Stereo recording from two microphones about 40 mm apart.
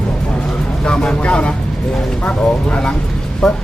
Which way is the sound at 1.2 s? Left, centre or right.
Left.